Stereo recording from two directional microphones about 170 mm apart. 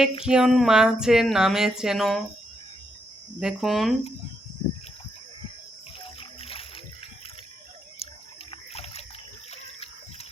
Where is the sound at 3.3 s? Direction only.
5° right (ahead or behind).